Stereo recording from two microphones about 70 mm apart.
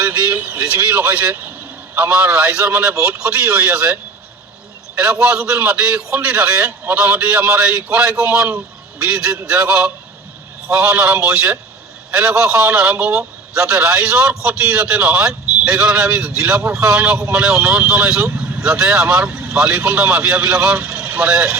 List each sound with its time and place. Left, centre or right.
0.0 s a man's voice: right
2.0 s a man's voice: right
2.9 s a man's voice: right
4.9 s a man's voice: centre
19.3 s vehicle: right
19.5 s a man's voice: centre
20.9 s vehicle: right